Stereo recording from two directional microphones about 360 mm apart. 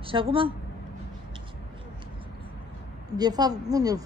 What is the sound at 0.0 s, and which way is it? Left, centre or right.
Speech, centre.